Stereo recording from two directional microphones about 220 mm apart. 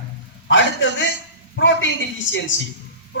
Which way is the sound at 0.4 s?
55° left (ahead or behind).